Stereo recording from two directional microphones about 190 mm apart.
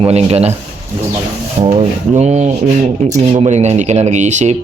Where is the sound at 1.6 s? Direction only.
35° right (ahead or behind).